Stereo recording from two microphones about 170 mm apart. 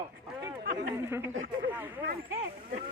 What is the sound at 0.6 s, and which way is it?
Speech, 65° right (ahead or behind).